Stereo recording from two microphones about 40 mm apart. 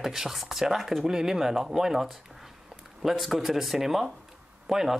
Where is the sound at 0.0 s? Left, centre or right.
Centre.